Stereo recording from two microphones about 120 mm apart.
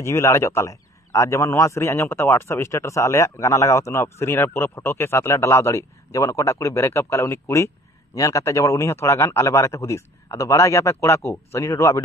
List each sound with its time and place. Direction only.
0.0 s a man's voice: 20° left (ahead or behind)